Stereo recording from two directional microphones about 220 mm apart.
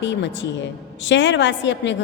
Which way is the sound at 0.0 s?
55° left (ahead or behind).